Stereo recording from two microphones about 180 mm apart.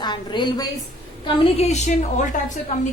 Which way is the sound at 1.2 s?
35° left (ahead or behind).